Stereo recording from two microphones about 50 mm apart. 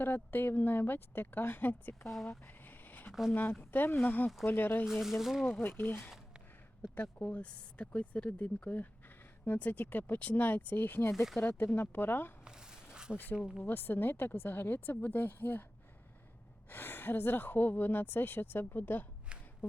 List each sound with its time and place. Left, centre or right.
0.0 s speech: left
2.5 s a sound: left
3.1 s speech: centre
3.6 s speech: left
4.9 s speech: centre
6.8 s speech: left
11.1 s speech: centre
11.4 s speech: left
12.5 s a sound: centre
13.6 s speech: left
16.6 s speech: left
19.3 s a sound: right